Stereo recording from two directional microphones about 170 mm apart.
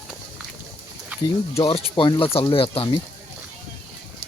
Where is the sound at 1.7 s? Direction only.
35° left (ahead or behind).